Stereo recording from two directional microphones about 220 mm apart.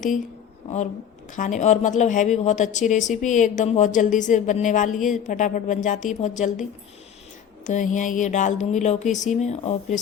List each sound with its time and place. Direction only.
1.4 s a woman's voice: 35° left (ahead or behind)
7.6 s a woman's voice: 35° left (ahead or behind)